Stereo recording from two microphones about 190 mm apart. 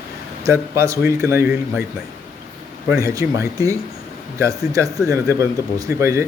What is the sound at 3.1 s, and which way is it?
Speech, 15° right (ahead or behind).